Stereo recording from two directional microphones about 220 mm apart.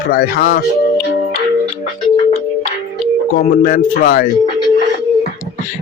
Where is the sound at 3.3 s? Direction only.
40° left (ahead or behind).